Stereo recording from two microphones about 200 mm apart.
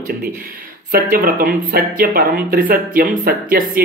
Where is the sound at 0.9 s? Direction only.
45° right (ahead or behind).